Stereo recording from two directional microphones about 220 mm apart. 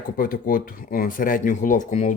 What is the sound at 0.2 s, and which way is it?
Speech, 40° left (ahead or behind).